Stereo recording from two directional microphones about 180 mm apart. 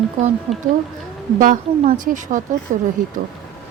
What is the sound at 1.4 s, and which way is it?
A woman's voice, 50° right (ahead or behind).